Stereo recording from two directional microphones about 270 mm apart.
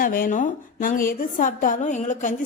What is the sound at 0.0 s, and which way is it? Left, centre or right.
A woman's voice, left.